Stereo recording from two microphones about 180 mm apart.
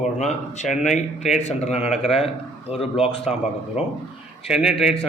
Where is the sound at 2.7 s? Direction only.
35° left (ahead or behind).